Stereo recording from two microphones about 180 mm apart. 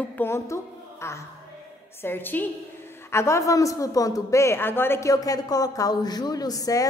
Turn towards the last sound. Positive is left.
turn(degrees=20)  # may be behind; listen again after turning